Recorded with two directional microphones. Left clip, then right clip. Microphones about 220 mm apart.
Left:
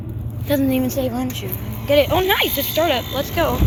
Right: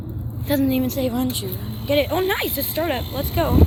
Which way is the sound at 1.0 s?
15° right (ahead or behind).